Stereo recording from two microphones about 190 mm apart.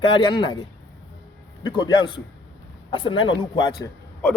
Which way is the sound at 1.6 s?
25° left (ahead or behind).